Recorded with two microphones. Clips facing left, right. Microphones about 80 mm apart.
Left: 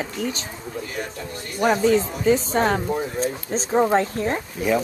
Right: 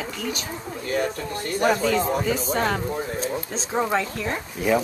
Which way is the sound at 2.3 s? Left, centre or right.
Left.